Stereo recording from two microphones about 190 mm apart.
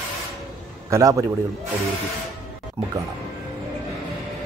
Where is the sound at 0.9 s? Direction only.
15° right (ahead or behind).